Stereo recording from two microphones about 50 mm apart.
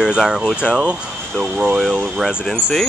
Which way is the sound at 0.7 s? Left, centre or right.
Right.